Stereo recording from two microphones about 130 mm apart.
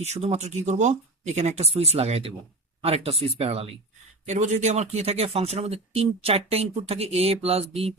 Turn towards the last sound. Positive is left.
turn(degrees=-50)  # may be behind; listen again after turning